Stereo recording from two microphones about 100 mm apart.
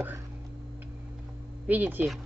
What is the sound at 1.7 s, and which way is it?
Speech, 20° right (ahead or behind).